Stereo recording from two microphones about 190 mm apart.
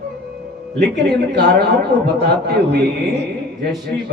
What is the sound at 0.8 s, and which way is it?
A man's voice, 60° right (ahead or behind).